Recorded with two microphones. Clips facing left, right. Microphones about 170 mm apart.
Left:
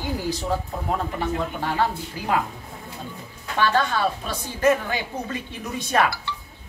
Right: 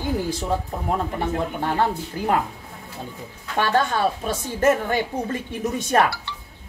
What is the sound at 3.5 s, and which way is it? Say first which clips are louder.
A woman's voice: right 1 dB; 50° right (ahead or behind).